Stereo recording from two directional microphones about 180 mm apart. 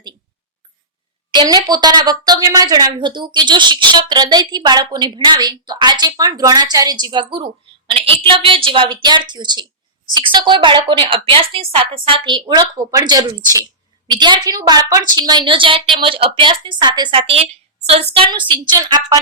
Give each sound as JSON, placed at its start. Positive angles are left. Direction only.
{"t": 1.3, "sound": "a woman's voice", "side_deg": -25}